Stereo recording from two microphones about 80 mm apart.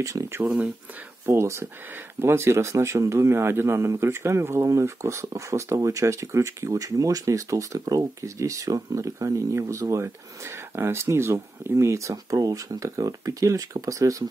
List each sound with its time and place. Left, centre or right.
0.0 s speech: right